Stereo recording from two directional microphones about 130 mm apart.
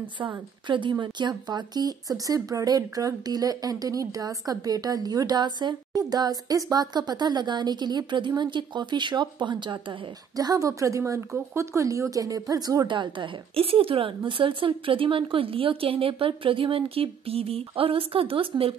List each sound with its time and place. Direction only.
0.7 s speech: 35° right (ahead or behind)